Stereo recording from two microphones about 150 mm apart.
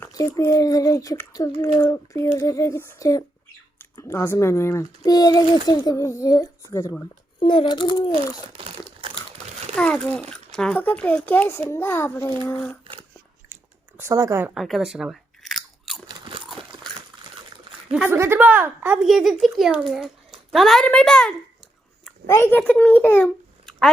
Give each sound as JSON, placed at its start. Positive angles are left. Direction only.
{"t": 0.0, "sound": "speech", "side_deg": 20}
{"t": 7.3, "sound": "a child's voice", "side_deg": 30}
{"t": 8.6, "sound": "crumpling", "side_deg": -35}
{"t": 9.7, "sound": "a child's voice", "side_deg": 5}
{"t": 13.5, "sound": "chewing", "side_deg": -15}
{"t": 14.5, "sound": "biting", "side_deg": 0}
{"t": 16.0, "sound": "crunch", "side_deg": -30}
{"t": 17.9, "sound": "a child's voice", "side_deg": -10}